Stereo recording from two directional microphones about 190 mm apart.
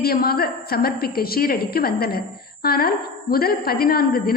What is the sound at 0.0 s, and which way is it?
A woman's voice, 55° left (ahead or behind).